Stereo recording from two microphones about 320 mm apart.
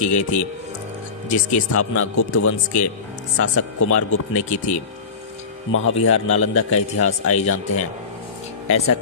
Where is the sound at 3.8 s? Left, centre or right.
Left.